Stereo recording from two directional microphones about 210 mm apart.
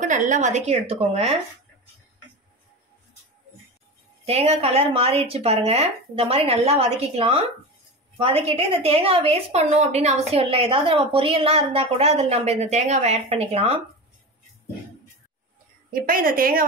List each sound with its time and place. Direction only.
0.0 s a woman's voice: 35° right (ahead or behind)
4.3 s a woman's voice: 30° right (ahead or behind)
15.9 s a woman's voice: 40° right (ahead or behind)